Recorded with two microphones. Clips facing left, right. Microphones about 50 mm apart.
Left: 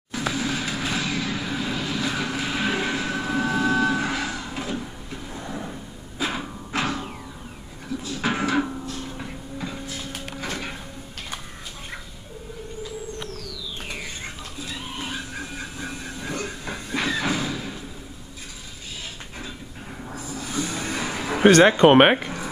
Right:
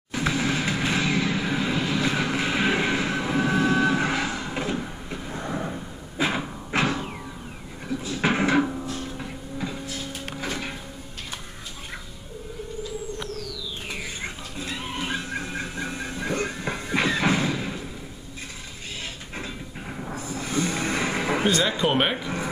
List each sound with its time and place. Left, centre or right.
0.1 s vehicle: right
5.3 s a sound: right
6.9 s music: centre
8.2 s music: right
8.5 s music: centre
10.4 s a sound: centre
13.4 s music: centre
14.6 s music: right
20.2 s a sound: right
21.5 s speech: left